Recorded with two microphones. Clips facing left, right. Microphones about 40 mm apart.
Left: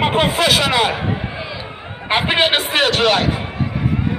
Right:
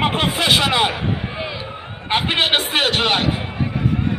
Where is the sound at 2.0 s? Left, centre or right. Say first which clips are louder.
Left 3 dB; centre.